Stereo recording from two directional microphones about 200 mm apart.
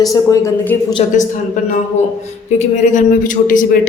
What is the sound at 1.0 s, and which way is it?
Speech, 30° left (ahead or behind).